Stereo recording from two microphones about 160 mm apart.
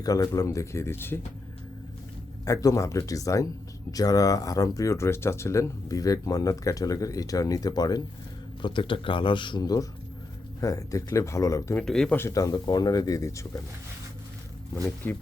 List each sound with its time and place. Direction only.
0.0 s speech: 20° left (ahead or behind)
2.4 s a man's voice: 20° left (ahead or behind)
11.8 s speech: 5° left (ahead or behind)